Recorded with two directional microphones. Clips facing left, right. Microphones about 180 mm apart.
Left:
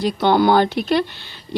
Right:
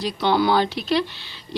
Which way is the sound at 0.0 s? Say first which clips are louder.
Left 4 dB; 50° left (ahead or behind).